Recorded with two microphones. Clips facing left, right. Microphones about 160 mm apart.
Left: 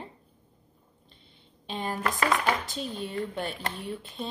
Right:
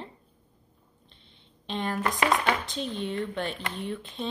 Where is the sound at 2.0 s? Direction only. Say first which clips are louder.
Right 1 dB; 20° right (ahead or behind).